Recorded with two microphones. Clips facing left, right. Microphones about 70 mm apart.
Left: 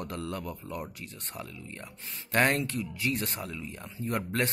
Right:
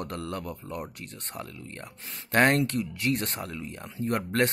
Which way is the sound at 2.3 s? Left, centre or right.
Right.